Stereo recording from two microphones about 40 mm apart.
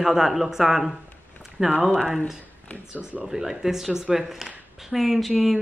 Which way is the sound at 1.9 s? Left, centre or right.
Centre.